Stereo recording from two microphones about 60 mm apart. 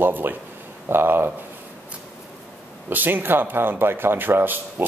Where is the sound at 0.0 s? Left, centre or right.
Right.